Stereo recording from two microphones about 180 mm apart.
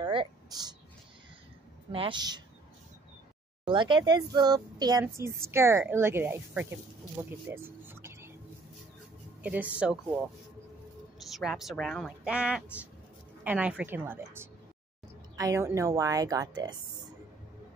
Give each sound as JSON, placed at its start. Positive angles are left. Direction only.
{"t": 0.0, "sound": "a sound", "side_deg": -25}
{"t": 1.9, "sound": "a woman's voice", "side_deg": -30}
{"t": 3.6, "sound": "a woman's voice", "side_deg": -25}
{"t": 7.2, "sound": "music", "side_deg": -10}
{"t": 9.4, "sound": "speech", "side_deg": -10}
{"t": 11.3, "sound": "a woman's voice", "side_deg": 0}